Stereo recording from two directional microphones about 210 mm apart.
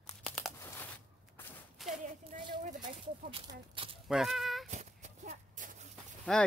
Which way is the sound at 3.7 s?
25° right (ahead or behind).